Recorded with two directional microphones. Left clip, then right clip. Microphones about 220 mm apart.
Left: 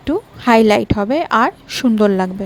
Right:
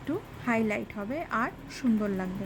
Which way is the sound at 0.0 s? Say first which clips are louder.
Left 15 dB; 30° left (ahead or behind).